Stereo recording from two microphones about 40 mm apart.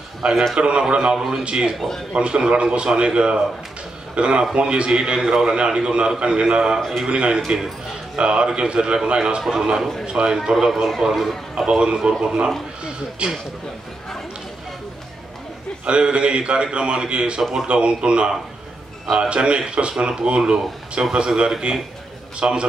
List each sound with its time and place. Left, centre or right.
0.2 s a man's voice: centre
7.4 s a man's voice: centre
8.2 s a man's voice: right
9.4 s speech: centre
10.0 s a man's voice: right
10.5 s speech: centre
11.5 s a man's voice: right
15.8 s a man's voice: right
17.4 s a man's voice: centre
17.6 s a man's voice: right